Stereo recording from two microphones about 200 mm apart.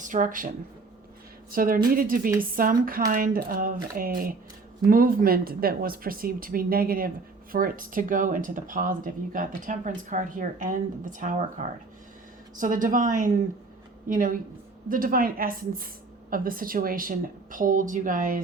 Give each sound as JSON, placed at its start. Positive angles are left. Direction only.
{"t": 0.0, "sound": "speech", "side_deg": -40}